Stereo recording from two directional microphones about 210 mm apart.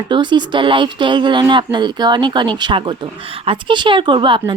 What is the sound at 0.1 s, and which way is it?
Speech, 20° right (ahead or behind).